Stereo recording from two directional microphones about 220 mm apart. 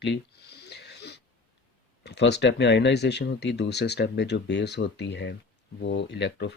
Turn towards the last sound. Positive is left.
turn(degrees=50)  # may be behind; listen again after turning